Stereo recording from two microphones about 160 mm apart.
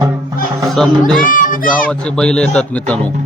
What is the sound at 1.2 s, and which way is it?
Speech, 55° left (ahead or behind).